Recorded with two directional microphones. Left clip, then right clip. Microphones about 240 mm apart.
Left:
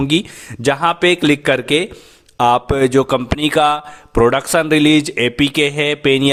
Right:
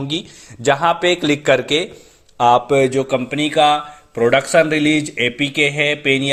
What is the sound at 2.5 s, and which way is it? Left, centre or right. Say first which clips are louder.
Speech: even; left.